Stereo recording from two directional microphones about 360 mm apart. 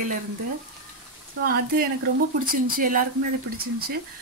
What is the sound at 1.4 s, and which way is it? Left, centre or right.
Speech, right.